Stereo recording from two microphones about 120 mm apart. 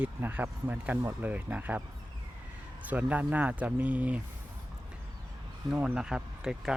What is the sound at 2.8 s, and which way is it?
Speech, 15° right (ahead or behind).